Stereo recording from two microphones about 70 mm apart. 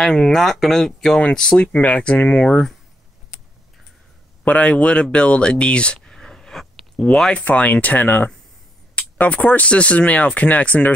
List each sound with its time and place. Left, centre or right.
0.0 s speech: centre
4.5 s speech: centre
5.1 s a sound: centre
7.1 s speech: centre